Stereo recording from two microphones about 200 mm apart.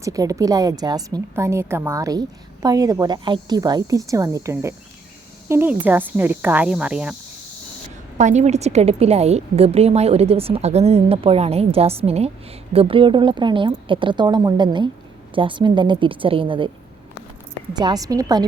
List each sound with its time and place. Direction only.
0.0 s a woman's voice: 15° right (ahead or behind)
8.2 s a woman's voice: 35° right (ahead or behind)
17.7 s a woman's voice: 20° right (ahead or behind)